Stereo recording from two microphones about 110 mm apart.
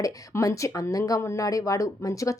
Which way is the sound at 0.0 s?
30° left (ahead or behind).